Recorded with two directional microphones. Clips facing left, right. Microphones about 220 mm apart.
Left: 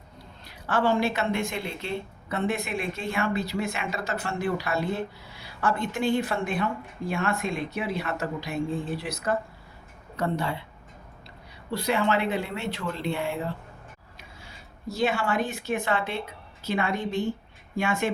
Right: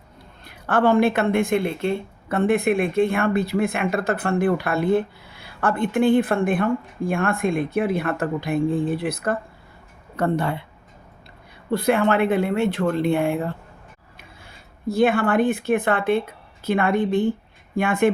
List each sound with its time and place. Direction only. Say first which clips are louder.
0.4 s speech: right 6 dB; 55° right (ahead or behind)
11.7 s speech: right 6 dB; 55° right (ahead or behind)